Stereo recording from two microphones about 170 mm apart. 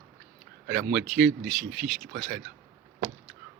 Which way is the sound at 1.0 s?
55° right (ahead or behind).